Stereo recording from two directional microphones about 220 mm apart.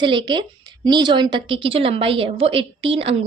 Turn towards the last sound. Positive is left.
turn(degrees=-25)  # may be behind; listen again after turning